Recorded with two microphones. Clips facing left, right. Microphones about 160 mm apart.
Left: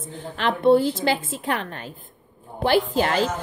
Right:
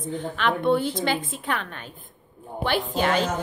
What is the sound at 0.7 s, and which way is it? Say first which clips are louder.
A woman's voice: left 8 dB; 35° left (ahead or behind).